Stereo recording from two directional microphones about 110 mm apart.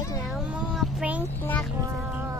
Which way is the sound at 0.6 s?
10° right (ahead or behind).